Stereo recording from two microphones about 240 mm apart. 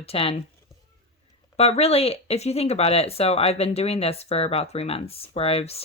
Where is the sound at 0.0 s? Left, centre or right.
Left.